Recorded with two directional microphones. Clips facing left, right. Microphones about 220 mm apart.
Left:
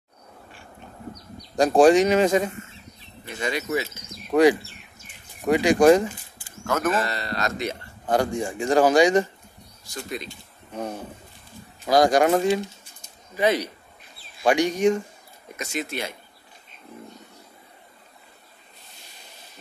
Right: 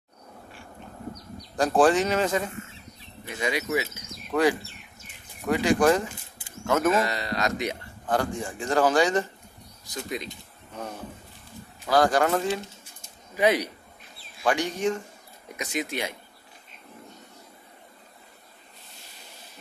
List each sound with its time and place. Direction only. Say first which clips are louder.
1.8 s a man's voice: left 5 dB; 15° left (ahead or behind)
3.3 s speech: left 1 dB; 10° right (ahead or behind)
4.3 s a man's voice: left 6 dB; 15° left (ahead or behind)
6.3 s a sound: right 4 dB; 20° right (ahead or behind)
6.9 s speech: right 1 dB; 15° right (ahead or behind)
8.1 s a man's voice: left 4 dB; 15° left (ahead or behind)
9.8 s speech: even; 20° right (ahead or behind)
11.9 s a man's voice: left 4 dB; 15° left (ahead or behind)
13.4 s speech: left 1 dB; 10° right (ahead or behind)
14.4 s a man's voice: left 6 dB; 15° left (ahead or behind)
15.5 s speech: even; 15° right (ahead or behind)